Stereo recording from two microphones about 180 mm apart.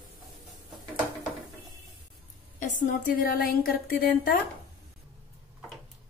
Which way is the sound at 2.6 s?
45° left (ahead or behind).